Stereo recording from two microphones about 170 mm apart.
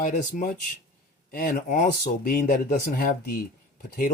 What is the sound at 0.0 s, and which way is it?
Speech, 50° left (ahead or behind).